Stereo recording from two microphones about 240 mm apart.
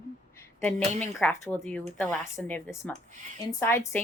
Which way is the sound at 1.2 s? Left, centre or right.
Centre.